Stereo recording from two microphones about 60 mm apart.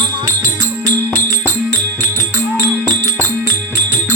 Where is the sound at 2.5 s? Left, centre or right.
Right.